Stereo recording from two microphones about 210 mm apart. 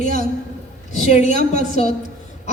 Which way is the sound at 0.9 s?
35° left (ahead or behind).